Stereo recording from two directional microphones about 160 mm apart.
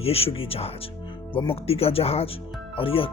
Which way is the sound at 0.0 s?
40° left (ahead or behind).